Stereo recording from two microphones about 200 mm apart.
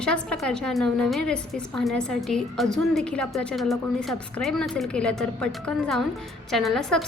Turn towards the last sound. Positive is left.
turn(degrees=0)  # may be behind; listen again after turning